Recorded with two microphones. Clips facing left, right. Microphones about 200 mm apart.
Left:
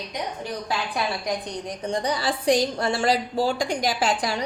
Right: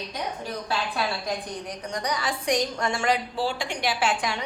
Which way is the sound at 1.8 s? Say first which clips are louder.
Left 4 dB; 30° left (ahead or behind).